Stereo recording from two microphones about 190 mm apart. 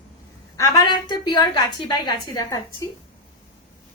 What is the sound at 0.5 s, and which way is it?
A woman's voice, 20° left (ahead or behind).